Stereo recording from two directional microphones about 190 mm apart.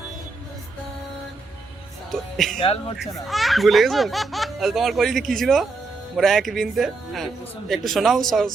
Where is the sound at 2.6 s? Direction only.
30° left (ahead or behind).